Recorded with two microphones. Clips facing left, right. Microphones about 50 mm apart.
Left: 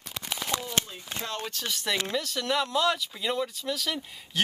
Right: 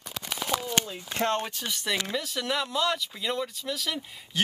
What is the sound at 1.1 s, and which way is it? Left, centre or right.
Speech, right.